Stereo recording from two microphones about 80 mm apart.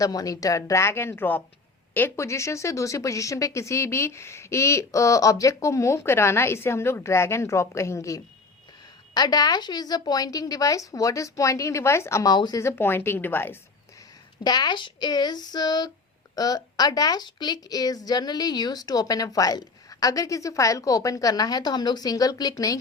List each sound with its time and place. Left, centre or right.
0.0 s speech: left
9.1 s speech: left
12.2 s child singing: left
12.5 s speech: left
14.4 s child singing: left
16.3 s speech: left